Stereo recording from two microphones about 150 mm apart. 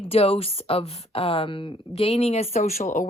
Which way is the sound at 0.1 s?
40° left (ahead or behind).